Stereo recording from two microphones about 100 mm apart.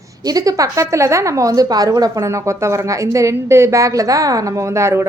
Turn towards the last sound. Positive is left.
turn(degrees=-30)  # may be behind; listen again after turning